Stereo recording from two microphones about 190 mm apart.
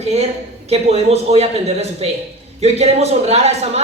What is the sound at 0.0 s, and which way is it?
A woman's voice, 35° right (ahead or behind).